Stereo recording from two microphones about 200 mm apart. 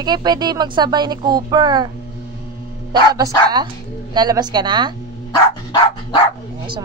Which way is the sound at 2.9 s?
20° right (ahead or behind).